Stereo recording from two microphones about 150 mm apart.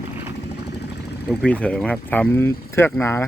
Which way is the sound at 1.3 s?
5° left (ahead or behind).